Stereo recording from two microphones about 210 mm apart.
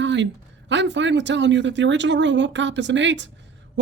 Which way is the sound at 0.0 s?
60° right (ahead or behind).